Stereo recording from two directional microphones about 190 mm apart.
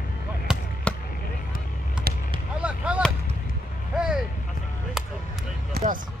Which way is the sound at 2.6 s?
5° right (ahead or behind).